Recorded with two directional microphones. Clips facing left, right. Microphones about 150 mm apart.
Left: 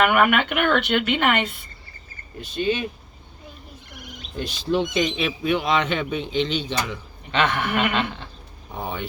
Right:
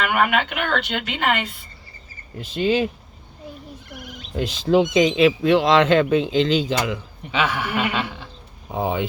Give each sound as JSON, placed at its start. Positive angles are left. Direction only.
{"t": 0.0, "sound": "speech", "side_deg": 60}
{"t": 2.5, "sound": "speech", "side_deg": -90}
{"t": 4.4, "sound": "speech", "side_deg": -90}
{"t": 7.3, "sound": "a man's voice", "side_deg": -10}
{"t": 8.7, "sound": "speech", "side_deg": -90}